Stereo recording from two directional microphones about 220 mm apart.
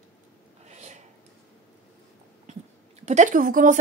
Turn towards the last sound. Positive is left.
turn(degrees=-35)  # may be behind; listen again after turning